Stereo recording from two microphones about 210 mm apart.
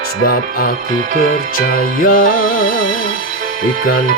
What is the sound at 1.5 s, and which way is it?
Music, 40° left (ahead or behind).